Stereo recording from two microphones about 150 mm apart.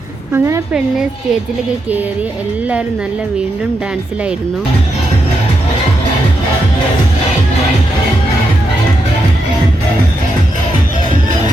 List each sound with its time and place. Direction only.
0.3 s a woman's voice: 15° right (ahead or behind)